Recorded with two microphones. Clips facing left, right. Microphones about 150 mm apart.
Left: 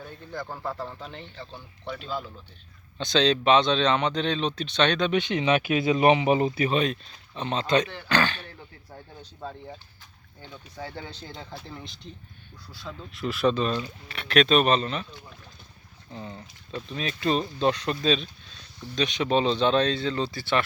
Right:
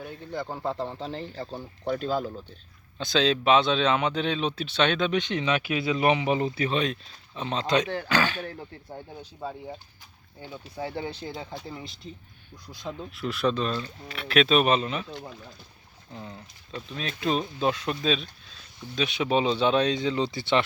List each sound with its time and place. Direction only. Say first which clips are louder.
0.0 s speech: right 3 dB; 15° right (ahead or behind); by 2.3 s 45° right (ahead or behind)
3.0 s speech: left 1 dB; 5° right (ahead or behind)
5.2 s speech: left 2 dB; 10° left (ahead or behind)
5.8 s speech: left 3 dB; 25° left (ahead or behind); by 8.4 s 5° right (ahead or behind)
8.9 s speech: right 4 dB; 20° right (ahead or behind); by 12.1 s centre (ahead or behind)
12.6 s speech: right 4 dB; 20° right (ahead or behind)
13.1 s speech: left 3 dB; centre (ahead or behind)
16.1 s speech: left 2 dB; centre (ahead or behind); by 20.7 s 20° right (ahead or behind)